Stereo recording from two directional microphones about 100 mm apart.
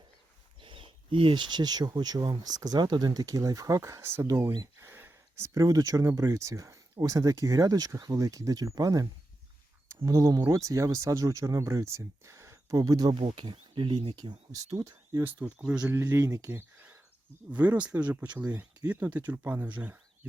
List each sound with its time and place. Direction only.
0.6 s speech: 60° right (ahead or behind); by 9.0 s 35° right (ahead or behind)
10.1 s speech: 35° right (ahead or behind)
13.1 s speech: 60° right (ahead or behind)
14.5 s speech: 35° right (ahead or behind)
15.2 s speech: 20° right (ahead or behind)
15.9 s speech: 25° right (ahead or behind)
17.5 s speech: 15° right (ahead or behind)